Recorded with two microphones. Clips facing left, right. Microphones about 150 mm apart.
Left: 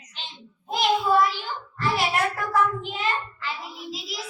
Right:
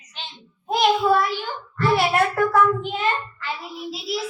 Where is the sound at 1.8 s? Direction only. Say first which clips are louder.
Right 5 dB; 50° right (ahead or behind).